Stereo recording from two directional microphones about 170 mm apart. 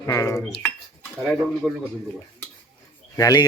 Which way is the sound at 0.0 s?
15° left (ahead or behind).